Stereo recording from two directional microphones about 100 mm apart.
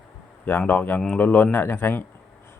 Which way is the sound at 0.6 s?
15° left (ahead or behind).